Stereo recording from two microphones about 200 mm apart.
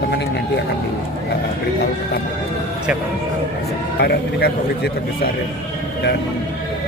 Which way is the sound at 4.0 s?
50° left (ahead or behind).